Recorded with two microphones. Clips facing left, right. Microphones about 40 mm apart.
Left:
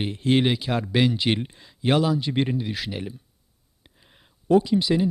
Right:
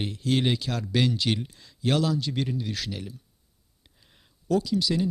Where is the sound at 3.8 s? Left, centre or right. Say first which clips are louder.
Left 4 dB; left.